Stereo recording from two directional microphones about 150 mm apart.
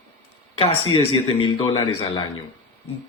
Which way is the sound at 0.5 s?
35° left (ahead or behind).